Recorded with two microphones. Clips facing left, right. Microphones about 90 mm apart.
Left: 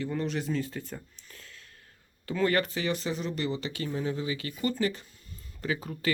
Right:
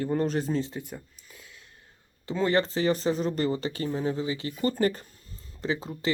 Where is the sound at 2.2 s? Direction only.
25° right (ahead or behind).